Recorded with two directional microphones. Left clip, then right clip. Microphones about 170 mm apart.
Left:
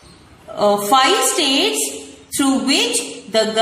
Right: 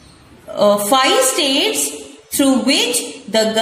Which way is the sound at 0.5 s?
25° right (ahead or behind).